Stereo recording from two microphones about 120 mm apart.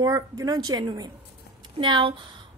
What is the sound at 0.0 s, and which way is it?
A woman's voice, 30° right (ahead or behind).